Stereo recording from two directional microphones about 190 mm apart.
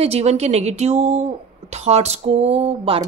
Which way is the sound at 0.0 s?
35° right (ahead or behind).